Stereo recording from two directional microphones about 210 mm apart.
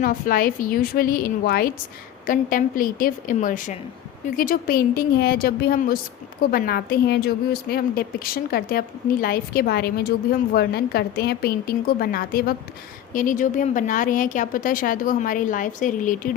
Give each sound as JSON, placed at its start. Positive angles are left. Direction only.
{"t": 0.0, "sound": "a woman's voice", "side_deg": 40}